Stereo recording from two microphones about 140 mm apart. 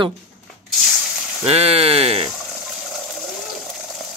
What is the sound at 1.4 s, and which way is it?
Speech, 45° right (ahead or behind).